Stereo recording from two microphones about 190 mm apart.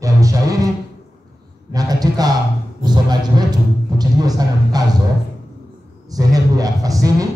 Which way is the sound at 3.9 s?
20° right (ahead or behind).